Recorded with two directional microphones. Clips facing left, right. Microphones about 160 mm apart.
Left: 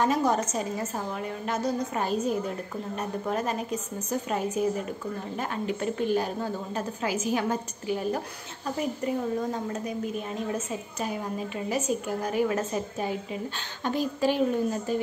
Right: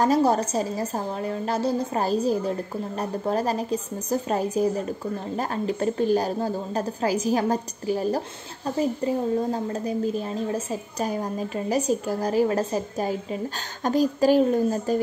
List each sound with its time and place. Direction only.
0.0 s a woman's voice: 35° right (ahead or behind)